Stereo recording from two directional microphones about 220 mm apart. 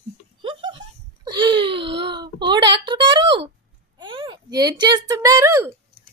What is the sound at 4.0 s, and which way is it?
Speech, 20° right (ahead or behind).